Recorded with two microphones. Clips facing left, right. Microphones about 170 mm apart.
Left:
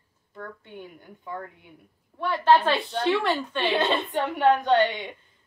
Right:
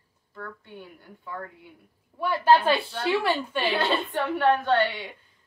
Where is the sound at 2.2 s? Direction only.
10° right (ahead or behind).